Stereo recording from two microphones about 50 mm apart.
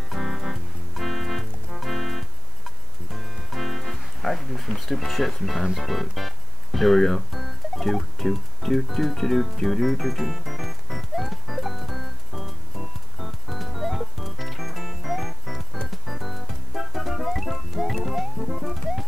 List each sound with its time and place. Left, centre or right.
0.1 s music: centre